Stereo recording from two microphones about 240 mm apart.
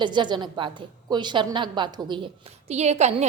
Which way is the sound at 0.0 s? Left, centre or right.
Centre.